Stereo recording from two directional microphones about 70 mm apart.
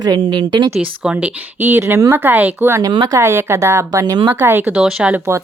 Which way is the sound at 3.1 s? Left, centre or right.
Right.